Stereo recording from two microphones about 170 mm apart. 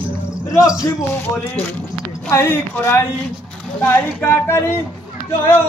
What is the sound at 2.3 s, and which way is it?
Speech, 15° left (ahead or behind).